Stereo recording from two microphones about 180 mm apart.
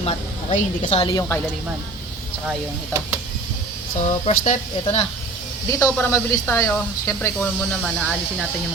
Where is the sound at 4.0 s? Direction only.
45° left (ahead or behind).